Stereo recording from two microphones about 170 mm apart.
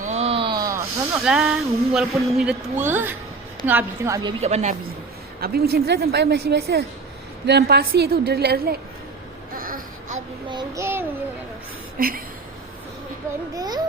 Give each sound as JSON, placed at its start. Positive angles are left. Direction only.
{"t": 0.0, "sound": "a sound", "side_deg": -40}
{"t": 1.2, "sound": "a woman's voice", "side_deg": -5}
{"t": 4.4, "sound": "speech", "side_deg": -40}
{"t": 5.4, "sound": "a woman's voice", "side_deg": -65}
{"t": 9.6, "sound": "baby cry", "side_deg": -55}
{"t": 10.5, "sound": "a child's voice", "side_deg": -25}
{"t": 11.9, "sound": "a sound", "side_deg": -60}
{"t": 13.5, "sound": "a child's voice", "side_deg": -25}